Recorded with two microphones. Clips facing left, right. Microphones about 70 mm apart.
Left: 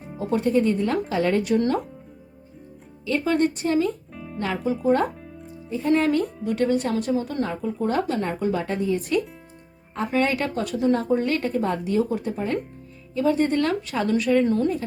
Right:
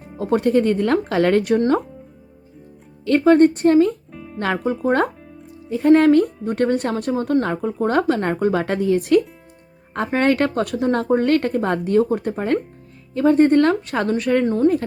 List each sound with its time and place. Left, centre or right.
0.2 s speech: right
3.1 s speech: right
4.1 s music: centre
4.4 s speech: right
10.1 s speech: right
14.4 s speech: right